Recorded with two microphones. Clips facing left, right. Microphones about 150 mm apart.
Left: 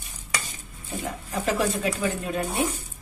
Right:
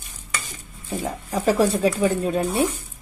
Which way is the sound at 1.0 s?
30° right (ahead or behind).